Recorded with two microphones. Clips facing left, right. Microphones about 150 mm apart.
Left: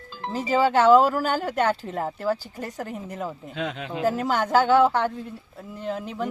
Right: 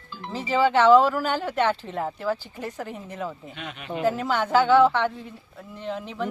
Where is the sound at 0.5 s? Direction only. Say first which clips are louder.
Even; 40° left (ahead or behind).